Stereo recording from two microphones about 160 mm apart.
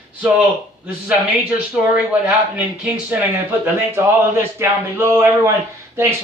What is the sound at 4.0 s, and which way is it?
Speech, 15° right (ahead or behind).